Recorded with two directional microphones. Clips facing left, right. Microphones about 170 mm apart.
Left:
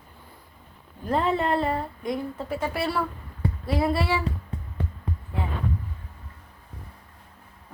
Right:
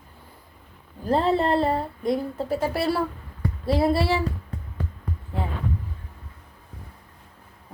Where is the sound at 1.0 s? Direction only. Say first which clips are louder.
Right 3 dB; 35° right (ahead or behind).